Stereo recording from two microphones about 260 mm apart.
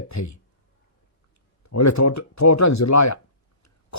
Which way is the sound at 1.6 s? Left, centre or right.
Left.